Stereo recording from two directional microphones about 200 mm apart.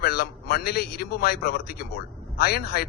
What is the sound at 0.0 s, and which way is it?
A man's voice, 50° left (ahead or behind).